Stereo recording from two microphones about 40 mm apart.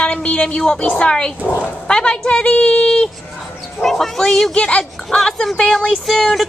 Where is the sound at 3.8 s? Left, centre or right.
Centre.